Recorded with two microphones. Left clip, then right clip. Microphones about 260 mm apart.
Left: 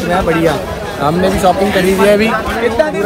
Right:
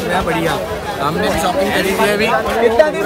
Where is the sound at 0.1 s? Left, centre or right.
Centre.